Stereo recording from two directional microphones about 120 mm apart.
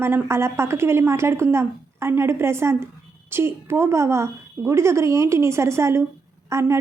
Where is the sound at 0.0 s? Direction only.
20° right (ahead or behind).